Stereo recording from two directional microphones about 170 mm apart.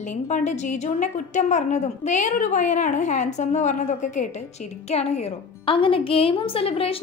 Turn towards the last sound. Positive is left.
turn(degrees=35)  # may be behind; listen again after turning